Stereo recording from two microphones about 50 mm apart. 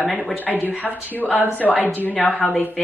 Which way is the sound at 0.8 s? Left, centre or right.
Left.